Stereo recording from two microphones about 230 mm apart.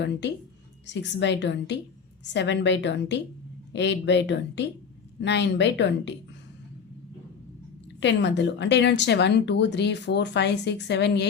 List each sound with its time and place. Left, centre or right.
0.0 s speech: left
8.0 s speech: left